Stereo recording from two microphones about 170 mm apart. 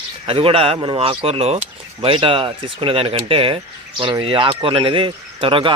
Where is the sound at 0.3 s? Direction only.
35° right (ahead or behind).